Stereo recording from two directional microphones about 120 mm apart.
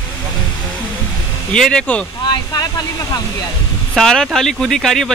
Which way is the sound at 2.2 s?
30° left (ahead or behind).